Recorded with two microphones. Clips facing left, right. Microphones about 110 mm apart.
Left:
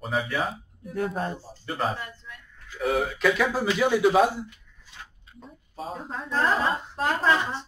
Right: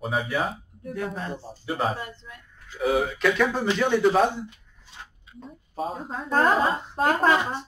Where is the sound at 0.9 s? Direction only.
45° left (ahead or behind).